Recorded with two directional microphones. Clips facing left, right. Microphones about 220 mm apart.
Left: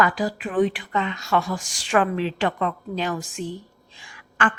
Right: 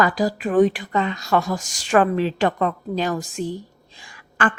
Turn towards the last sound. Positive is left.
turn(degrees=-35)  # may be behind; listen again after turning